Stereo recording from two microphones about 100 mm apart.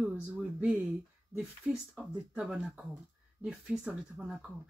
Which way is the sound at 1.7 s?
5° right (ahead or behind).